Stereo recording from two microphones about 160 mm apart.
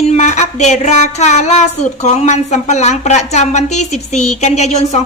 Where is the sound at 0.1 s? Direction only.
45° left (ahead or behind).